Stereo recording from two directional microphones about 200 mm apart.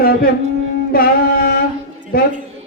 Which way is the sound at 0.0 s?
50° left (ahead or behind).